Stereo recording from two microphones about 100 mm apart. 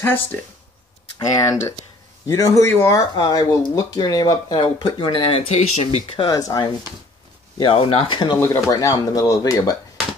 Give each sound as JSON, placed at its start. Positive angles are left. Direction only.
{"t": 0.0, "sound": "speech", "side_deg": 20}
{"t": 1.1, "sound": "speech", "side_deg": 35}
{"t": 3.2, "sound": "speech", "side_deg": 45}
{"t": 6.1, "sound": "speech", "side_deg": 40}
{"t": 7.5, "sound": "speech", "side_deg": 55}
{"t": 8.4, "sound": "speech", "side_deg": 35}